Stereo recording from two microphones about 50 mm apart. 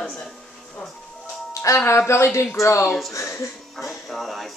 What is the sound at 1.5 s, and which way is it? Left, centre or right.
Music, left.